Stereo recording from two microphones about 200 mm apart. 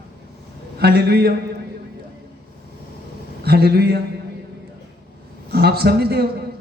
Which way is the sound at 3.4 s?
50° right (ahead or behind).